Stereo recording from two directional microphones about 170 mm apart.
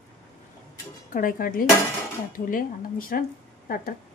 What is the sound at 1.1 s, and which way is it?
A woman's voice, 55° left (ahead or behind).